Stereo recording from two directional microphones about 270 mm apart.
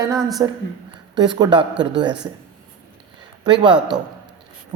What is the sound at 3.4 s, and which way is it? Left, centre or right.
Speech, centre.